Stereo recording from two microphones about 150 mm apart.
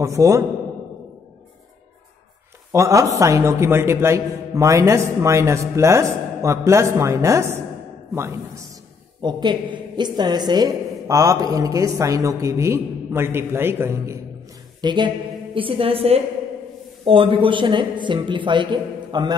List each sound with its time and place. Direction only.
0.0 s a woman's voice: 20° right (ahead or behind)
2.7 s a woman's voice: 20° right (ahead or behind)
9.2 s a woman's voice: 30° right (ahead or behind)
14.8 s speech: 30° right (ahead or behind)